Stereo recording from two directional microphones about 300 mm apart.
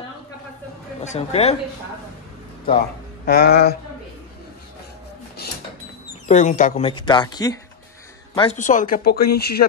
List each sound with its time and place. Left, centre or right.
1.0 s speech: left
3.3 s speech: left
6.2 s speech: left